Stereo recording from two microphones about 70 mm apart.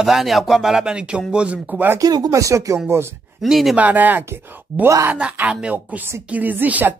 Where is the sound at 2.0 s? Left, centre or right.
Right.